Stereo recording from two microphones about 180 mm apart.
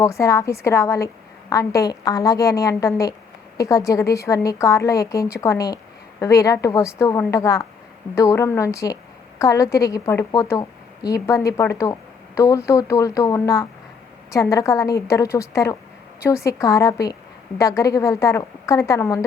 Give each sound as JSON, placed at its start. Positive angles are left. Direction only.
{"t": 0.0, "sound": "a woman's voice", "side_deg": 15}